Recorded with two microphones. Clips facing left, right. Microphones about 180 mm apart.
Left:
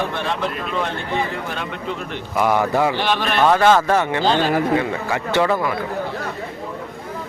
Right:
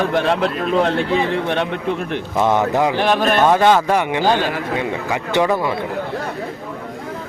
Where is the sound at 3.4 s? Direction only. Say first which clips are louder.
Left 1 dB; 15° right (ahead or behind).